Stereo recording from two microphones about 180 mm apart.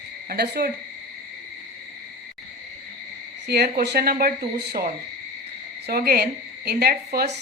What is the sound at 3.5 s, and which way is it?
A woman's voice, 65° right (ahead or behind).